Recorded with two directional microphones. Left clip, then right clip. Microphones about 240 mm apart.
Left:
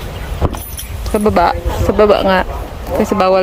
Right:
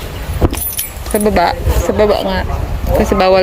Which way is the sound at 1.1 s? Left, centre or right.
Centre.